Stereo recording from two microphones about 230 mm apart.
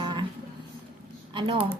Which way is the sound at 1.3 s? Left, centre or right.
Right.